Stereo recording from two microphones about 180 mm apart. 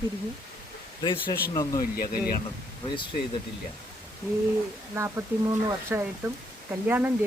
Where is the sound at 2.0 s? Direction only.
60° left (ahead or behind).